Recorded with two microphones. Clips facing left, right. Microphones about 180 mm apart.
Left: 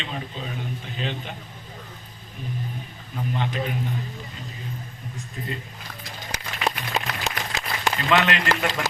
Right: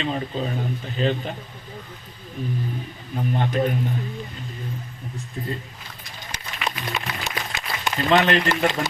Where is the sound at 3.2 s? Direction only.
50° right (ahead or behind).